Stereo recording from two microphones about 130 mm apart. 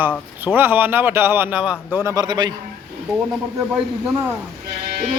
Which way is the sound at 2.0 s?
30° right (ahead or behind).